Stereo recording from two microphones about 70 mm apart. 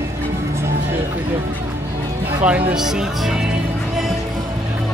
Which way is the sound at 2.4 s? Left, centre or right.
Centre.